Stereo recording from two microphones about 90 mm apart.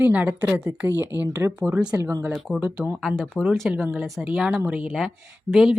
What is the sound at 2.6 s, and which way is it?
Speech, 15° right (ahead or behind).